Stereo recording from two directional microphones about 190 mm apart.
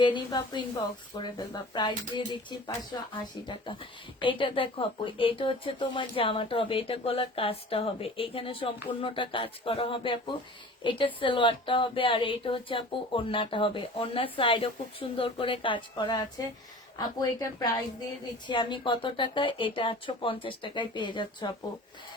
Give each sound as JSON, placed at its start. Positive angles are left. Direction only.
{"t": 0.0, "sound": "speech", "side_deg": 25}